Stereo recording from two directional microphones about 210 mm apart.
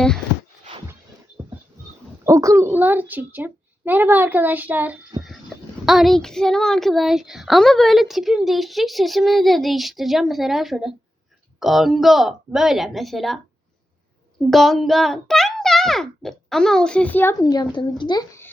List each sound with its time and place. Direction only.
1.4 s a sound: 15° right (ahead or behind)
2.2 s a child's voice: 15° right (ahead or behind)
14.5 s a child's voice: centre (ahead or behind)